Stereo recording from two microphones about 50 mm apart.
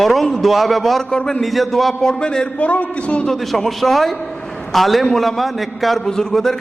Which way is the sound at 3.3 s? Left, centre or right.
Centre.